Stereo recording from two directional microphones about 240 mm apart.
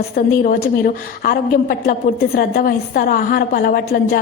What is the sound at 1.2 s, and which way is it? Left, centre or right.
A woman's voice, left.